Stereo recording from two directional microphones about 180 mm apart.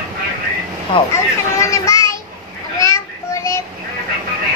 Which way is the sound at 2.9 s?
15° left (ahead or behind).